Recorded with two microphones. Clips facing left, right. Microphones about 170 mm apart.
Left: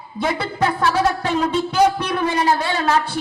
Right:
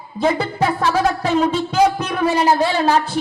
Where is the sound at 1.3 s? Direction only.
30° right (ahead or behind).